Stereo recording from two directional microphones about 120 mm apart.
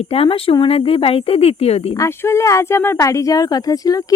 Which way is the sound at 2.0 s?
20° left (ahead or behind).